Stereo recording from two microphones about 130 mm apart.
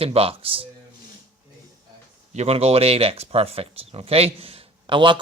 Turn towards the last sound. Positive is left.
turn(degrees=-40)  # may be behind; listen again after turning